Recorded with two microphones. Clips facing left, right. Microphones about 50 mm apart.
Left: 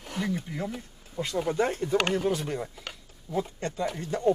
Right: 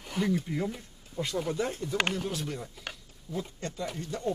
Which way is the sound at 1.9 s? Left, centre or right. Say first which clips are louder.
Left 5 dB; left.